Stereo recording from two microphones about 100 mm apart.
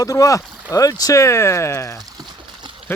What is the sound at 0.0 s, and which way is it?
Speech, 35° left (ahead or behind).